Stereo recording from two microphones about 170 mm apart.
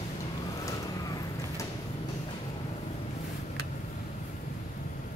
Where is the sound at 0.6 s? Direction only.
20° left (ahead or behind).